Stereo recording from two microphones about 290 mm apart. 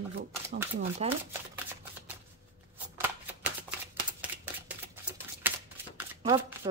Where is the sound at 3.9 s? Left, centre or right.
Centre.